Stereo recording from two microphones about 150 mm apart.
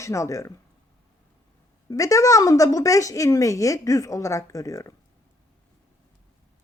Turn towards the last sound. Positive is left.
turn(degrees=20)  # may be behind; listen again after turning